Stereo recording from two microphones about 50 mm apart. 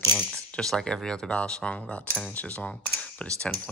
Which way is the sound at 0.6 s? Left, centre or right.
Centre.